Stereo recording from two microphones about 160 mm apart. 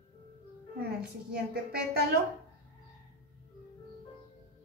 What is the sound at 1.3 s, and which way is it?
Speech, 75° right (ahead or behind).